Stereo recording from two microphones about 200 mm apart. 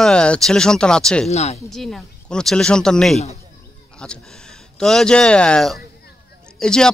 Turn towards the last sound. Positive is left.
turn(degrees=5)  # may be behind; listen again after turning